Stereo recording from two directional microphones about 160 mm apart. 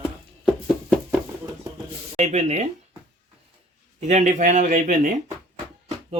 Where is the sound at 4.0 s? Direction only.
45° right (ahead or behind).